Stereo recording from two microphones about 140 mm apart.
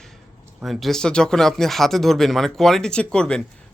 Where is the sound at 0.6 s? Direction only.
Centre (ahead or behind).